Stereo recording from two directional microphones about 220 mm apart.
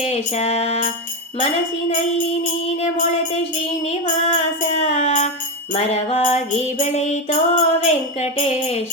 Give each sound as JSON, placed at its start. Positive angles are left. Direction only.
{"t": 0.0, "sound": "music", "side_deg": 30}
{"t": 4.0, "sound": "music", "side_deg": 30}